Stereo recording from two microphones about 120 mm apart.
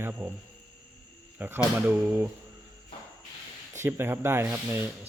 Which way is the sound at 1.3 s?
15° right (ahead or behind).